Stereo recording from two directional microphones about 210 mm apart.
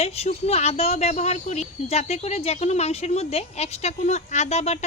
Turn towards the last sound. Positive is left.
turn(degrees=30)  # may be behind; listen again after turning